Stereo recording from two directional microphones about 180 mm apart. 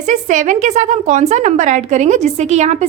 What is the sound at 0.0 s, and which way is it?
A woman's voice, 40° right (ahead or behind).